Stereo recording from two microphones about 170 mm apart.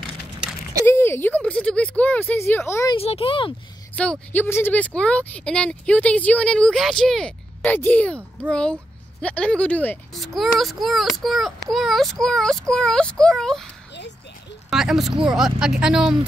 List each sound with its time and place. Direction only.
0.8 s a woman's voice: 15° left (ahead or behind)
2.9 s a child's voice: 35° left (ahead or behind)
3.9 s a woman's voice: 5° left (ahead or behind)
14.7 s a child's voice: centre (ahead or behind)